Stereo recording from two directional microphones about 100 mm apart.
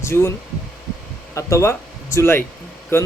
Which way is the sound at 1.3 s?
30° left (ahead or behind).